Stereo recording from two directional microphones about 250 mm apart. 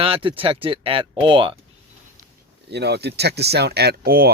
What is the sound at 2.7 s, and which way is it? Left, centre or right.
Speech, right.